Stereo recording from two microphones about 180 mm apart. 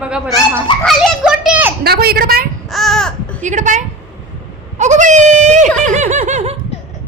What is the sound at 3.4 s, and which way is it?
Speech, 40° right (ahead or behind).